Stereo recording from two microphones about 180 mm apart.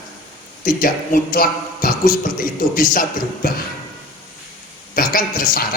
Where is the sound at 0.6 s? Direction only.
50° left (ahead or behind).